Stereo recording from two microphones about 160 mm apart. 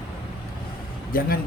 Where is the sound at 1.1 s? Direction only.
65° left (ahead or behind).